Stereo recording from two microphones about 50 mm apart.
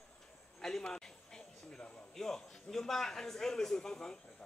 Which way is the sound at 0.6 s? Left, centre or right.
Centre.